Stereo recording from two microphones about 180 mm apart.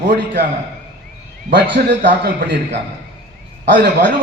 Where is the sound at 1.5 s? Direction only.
75° right (ahead or behind).